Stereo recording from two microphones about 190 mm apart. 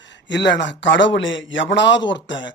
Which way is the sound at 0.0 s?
70° left (ahead or behind).